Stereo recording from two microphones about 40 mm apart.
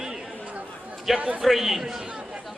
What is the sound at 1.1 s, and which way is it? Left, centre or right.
Speech, centre.